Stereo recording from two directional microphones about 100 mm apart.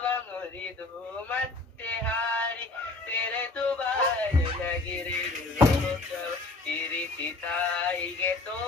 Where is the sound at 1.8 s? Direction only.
15° left (ahead or behind).